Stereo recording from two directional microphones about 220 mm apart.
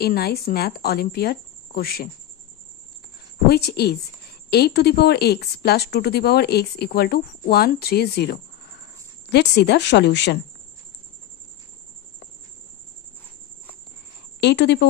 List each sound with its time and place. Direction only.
0.0 s speech: 45° left (ahead or behind)
3.4 s speech: 45° left (ahead or behind)
14.4 s speech: 50° left (ahead or behind)